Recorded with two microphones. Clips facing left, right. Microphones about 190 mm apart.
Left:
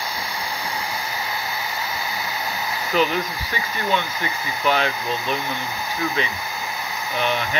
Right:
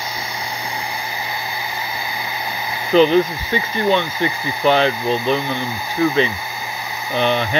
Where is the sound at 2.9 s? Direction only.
30° right (ahead or behind).